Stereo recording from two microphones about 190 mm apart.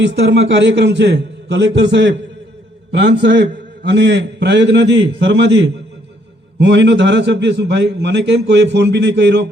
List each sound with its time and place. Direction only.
0.0 s a man's voice: 65° right (ahead or behind)